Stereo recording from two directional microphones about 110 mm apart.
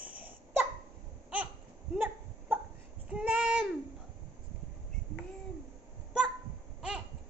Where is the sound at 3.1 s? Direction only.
10° right (ahead or behind).